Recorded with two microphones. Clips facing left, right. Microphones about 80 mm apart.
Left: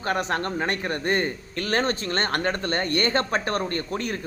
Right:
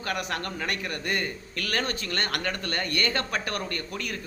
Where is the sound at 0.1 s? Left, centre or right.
Left.